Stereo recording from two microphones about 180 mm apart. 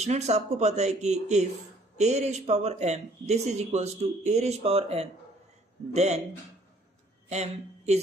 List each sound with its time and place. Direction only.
0.0 s speech: 40° right (ahead or behind)
7.2 s speech: 35° right (ahead or behind)